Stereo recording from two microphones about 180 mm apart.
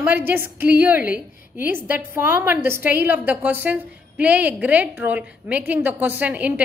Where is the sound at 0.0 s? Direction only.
10° right (ahead or behind).